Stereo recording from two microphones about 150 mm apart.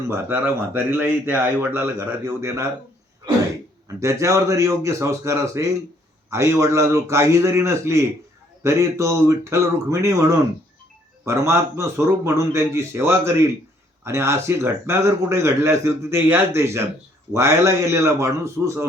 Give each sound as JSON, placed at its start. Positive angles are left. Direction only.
{"t": 0.1, "sound": "a man's voice", "side_deg": -15}
{"t": 3.8, "sound": "a man's voice", "side_deg": -20}